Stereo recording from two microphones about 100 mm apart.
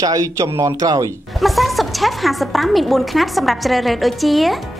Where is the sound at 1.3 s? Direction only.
Centre (ahead or behind).